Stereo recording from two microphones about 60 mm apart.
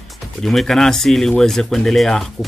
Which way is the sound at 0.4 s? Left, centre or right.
Centre.